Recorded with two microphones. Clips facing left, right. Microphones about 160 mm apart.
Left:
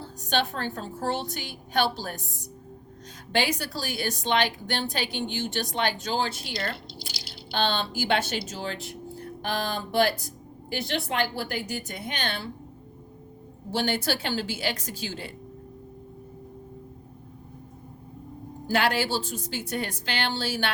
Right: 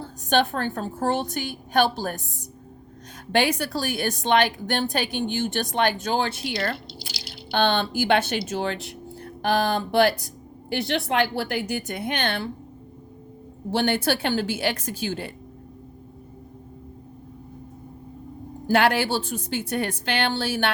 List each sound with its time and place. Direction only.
0.0 s a woman's voice: 50° right (ahead or behind)
3.3 s a woman's voice: 55° right (ahead or behind)
13.7 s a woman's voice: 55° right (ahead or behind)
18.7 s a woman's voice: 60° right (ahead or behind)